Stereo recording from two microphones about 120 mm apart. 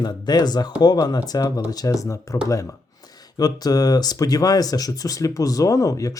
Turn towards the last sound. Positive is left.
turn(degrees=30)  # may be behind; listen again after turning